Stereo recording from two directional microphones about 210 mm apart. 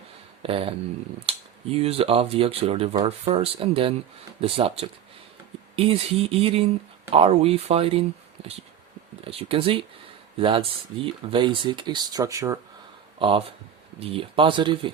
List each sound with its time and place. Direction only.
0.4 s speech: 25° right (ahead or behind)